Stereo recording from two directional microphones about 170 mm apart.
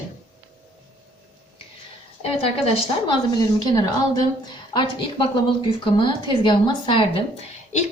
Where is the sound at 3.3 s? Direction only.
25° left (ahead or behind).